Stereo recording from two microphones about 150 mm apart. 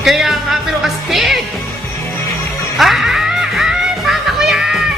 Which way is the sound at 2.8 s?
Centre (ahead or behind).